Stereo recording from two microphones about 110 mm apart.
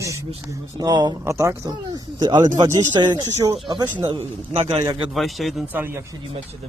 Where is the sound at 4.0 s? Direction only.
55° right (ahead or behind).